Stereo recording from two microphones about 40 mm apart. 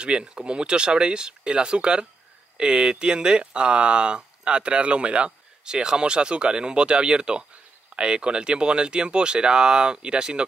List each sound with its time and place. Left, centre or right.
0.0 s speech: right